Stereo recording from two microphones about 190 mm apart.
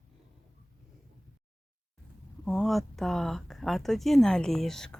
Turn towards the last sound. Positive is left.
turn(degrees=0)  # may be behind; listen again after turning